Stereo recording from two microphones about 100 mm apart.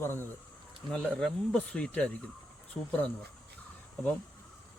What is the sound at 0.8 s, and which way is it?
Speech, centre (ahead or behind).